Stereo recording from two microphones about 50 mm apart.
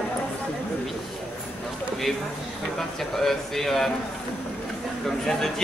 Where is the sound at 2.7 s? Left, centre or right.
Centre.